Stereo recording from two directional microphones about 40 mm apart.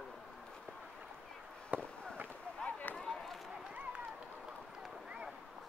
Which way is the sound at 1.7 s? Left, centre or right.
Right.